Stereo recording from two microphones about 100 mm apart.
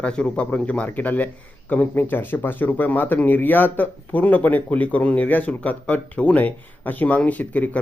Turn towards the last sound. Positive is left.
turn(degrees=15)  # may be behind; listen again after turning